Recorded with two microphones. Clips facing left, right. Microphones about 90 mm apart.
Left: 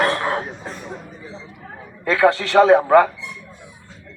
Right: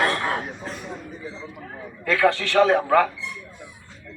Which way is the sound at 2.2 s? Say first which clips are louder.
Left 5 dB; 30° left (ahead or behind).